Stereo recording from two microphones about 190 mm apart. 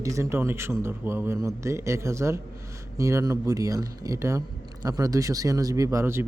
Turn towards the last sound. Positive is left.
turn(degrees=-15)  # may be behind; listen again after turning